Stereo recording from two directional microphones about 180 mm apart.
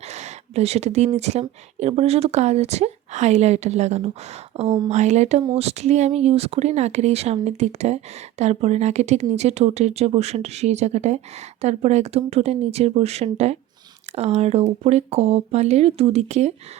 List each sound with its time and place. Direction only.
0.1 s speech: 35° right (ahead or behind)